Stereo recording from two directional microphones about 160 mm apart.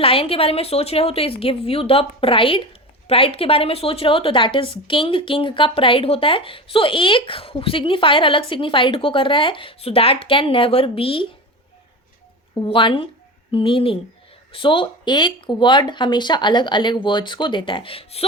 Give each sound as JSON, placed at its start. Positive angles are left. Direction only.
{"t": 0.0, "sound": "a woman's voice", "side_deg": 35}
{"t": 12.5, "sound": "a woman's voice", "side_deg": 30}